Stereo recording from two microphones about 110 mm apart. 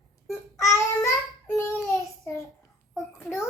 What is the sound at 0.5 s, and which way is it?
Child singing, 25° left (ahead or behind).